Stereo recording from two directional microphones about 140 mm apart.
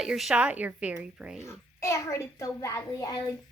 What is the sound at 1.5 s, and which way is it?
A child's voice, 20° left (ahead or behind).